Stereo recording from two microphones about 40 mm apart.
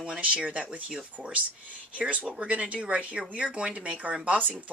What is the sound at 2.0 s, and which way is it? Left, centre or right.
Speech, right.